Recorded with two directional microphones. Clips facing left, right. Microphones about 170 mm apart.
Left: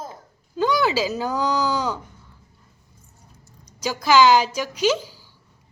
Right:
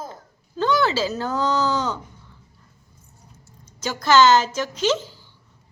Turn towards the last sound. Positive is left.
turn(degrees=10)  # may be behind; listen again after turning